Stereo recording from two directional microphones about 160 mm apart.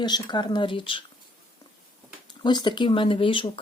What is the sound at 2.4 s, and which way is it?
Speech, 30° left (ahead or behind).